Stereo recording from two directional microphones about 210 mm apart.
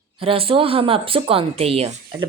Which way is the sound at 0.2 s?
25° right (ahead or behind).